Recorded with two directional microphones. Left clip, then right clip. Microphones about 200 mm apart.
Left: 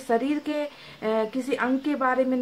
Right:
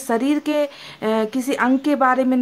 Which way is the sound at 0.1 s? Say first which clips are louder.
Right 5 dB; 40° right (ahead or behind).